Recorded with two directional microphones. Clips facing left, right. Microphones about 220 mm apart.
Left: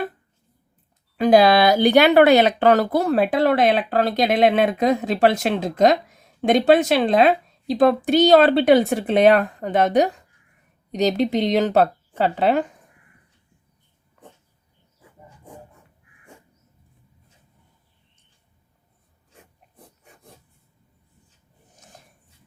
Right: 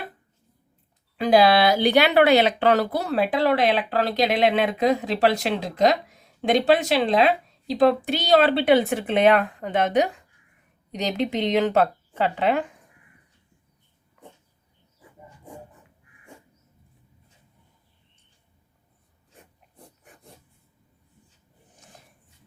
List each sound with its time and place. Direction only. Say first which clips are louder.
1.1 s a woman's voice: left 3 dB; 45° left (ahead or behind)